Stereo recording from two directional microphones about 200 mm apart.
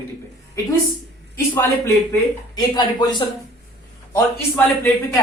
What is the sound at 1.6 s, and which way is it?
Speech, 15° left (ahead or behind).